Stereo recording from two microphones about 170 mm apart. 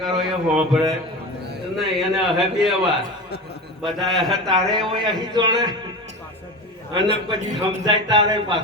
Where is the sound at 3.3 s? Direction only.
75° left (ahead or behind).